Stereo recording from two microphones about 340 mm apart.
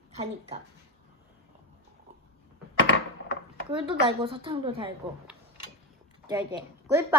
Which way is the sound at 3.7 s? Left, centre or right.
Centre.